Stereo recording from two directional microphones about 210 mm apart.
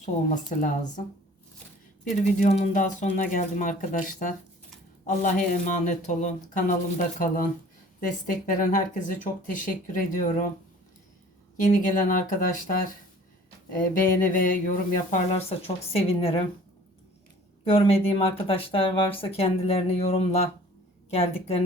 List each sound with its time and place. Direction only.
0.0 s speech: 35° left (ahead or behind)
2.0 s speech: 35° left (ahead or behind)
8.0 s speech: 40° left (ahead or behind)
11.6 s speech: 35° left (ahead or behind)
17.7 s speech: 25° left (ahead or behind)